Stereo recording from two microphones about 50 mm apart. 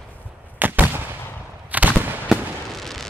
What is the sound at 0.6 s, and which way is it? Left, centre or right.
Gunshot, right.